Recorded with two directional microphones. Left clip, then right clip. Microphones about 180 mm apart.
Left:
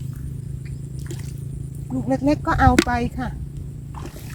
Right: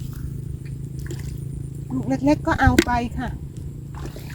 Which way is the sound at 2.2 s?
20° left (ahead or behind).